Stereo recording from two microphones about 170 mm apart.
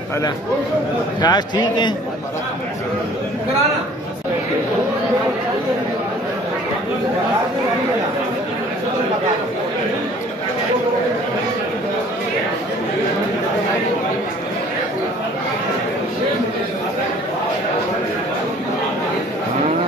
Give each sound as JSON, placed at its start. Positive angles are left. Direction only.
{"t": 1.2, "sound": "a man's voice", "side_deg": 25}